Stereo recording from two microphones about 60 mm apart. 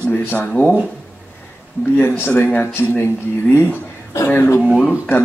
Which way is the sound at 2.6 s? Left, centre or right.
Left.